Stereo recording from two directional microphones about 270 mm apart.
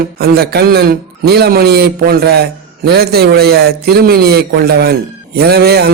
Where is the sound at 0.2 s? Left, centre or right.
Right.